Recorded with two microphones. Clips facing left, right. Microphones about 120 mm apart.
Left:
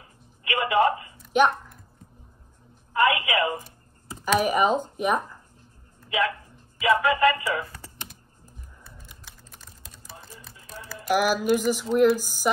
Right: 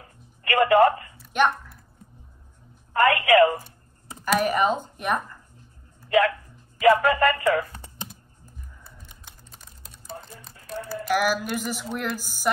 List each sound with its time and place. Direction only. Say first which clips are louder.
0.0 s music: right 3 dB; 50° right (ahead or behind)
2.9 s a woman's voice: right 4 dB; 50° right (ahead or behind)
4.4 s speech: left 1 dB; 10° left (ahead or behind)
6.8 s speech: right 2 dB; 45° right (ahead or behind)
9.2 s typing: even; 20° right (ahead or behind)
10.1 s music: right 6 dB; 50° right (ahead or behind)
11.1 s a sound: left 3 dB; 5° left (ahead or behind)